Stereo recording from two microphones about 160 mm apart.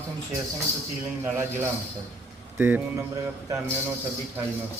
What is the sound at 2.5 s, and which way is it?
Speech, 10° right (ahead or behind).